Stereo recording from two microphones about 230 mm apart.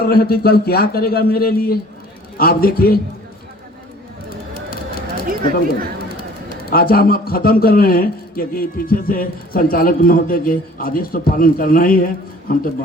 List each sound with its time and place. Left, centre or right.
0.0 s a man's voice: left
6.7 s a man's voice: left